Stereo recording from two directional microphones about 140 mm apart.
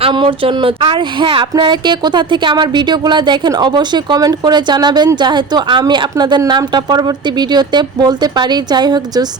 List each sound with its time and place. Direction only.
0.0 s speech: 35° right (ahead or behind)